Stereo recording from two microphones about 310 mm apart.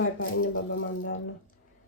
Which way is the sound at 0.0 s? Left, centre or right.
Left.